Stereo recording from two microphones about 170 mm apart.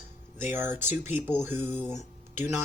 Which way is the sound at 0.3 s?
15° right (ahead or behind).